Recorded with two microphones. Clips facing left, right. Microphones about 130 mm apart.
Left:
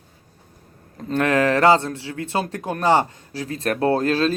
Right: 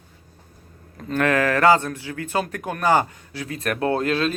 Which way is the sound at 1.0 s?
25° left (ahead or behind).